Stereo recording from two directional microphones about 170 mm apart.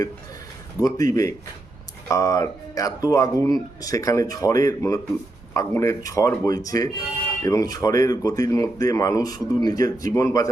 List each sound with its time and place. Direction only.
0.8 s speech: 20° left (ahead or behind)